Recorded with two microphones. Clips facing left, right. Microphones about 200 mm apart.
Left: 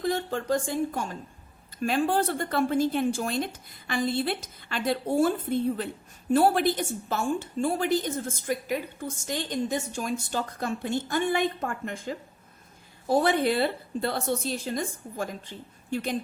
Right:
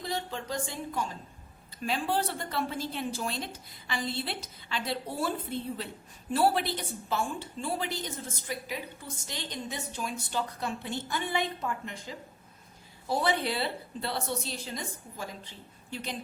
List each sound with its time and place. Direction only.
0.0 s a woman's voice: 50° left (ahead or behind)